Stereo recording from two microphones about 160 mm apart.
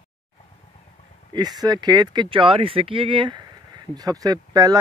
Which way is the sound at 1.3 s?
25° right (ahead or behind).